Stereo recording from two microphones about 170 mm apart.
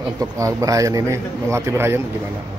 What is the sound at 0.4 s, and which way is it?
A man's voice, 20° right (ahead or behind).